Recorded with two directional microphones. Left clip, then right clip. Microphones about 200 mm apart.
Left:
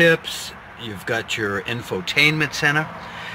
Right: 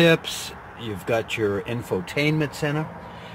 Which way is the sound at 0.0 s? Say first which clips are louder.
Left 2 dB; 40° right (ahead or behind).